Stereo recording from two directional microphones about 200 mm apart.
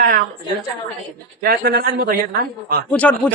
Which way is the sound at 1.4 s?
45° right (ahead or behind).